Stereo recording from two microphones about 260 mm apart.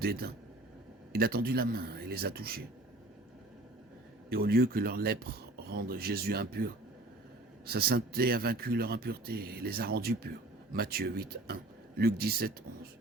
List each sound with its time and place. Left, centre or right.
0.0 s speech: right
4.3 s speech: right